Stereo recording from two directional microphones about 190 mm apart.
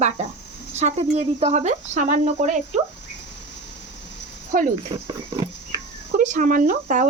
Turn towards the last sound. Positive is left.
turn(degrees=-45)  # may be behind; listen again after turning